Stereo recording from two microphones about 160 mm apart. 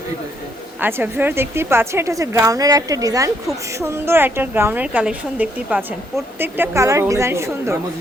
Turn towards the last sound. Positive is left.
turn(degrees=-15)  # may be behind; listen again after turning